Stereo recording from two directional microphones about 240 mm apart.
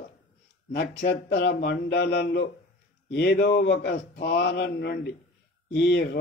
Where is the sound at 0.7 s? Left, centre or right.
Left.